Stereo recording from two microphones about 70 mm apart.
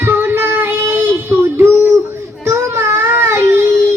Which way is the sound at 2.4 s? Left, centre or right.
Right.